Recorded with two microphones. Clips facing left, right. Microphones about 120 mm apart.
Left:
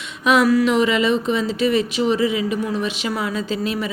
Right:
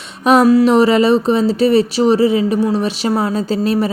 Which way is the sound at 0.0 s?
35° right (ahead or behind).